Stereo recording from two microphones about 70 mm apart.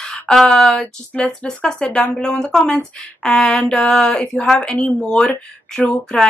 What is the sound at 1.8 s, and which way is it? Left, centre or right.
Speech, left.